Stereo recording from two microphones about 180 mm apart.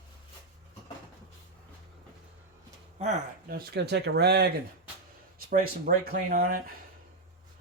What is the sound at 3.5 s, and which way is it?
Speech, 60° right (ahead or behind).